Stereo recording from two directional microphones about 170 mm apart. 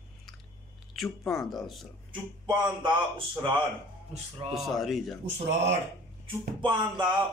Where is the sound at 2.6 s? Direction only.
30° right (ahead or behind).